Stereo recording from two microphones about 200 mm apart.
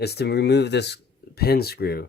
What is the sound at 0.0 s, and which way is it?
Speech, 55° left (ahead or behind).